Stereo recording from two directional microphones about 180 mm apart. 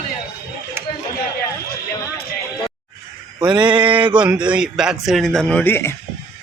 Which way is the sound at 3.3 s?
25° right (ahead or behind).